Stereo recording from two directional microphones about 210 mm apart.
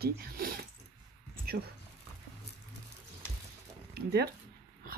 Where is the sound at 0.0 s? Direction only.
45° right (ahead or behind).